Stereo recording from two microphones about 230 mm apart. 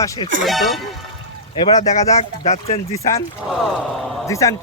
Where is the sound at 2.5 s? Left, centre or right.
Left.